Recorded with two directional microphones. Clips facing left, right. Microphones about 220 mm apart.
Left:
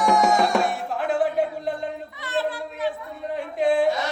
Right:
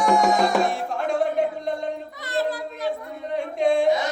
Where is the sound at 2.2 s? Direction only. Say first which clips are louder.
Right 1 dB; 40° right (ahead or behind).